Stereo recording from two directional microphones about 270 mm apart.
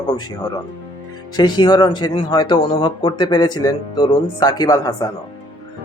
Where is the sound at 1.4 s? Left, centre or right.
Centre.